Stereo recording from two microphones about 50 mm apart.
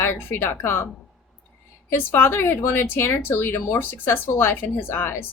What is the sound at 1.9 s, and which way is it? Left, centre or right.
A woman's voice, left.